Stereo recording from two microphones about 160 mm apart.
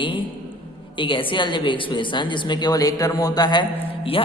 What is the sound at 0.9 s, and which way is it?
A man's voice, 30° left (ahead or behind).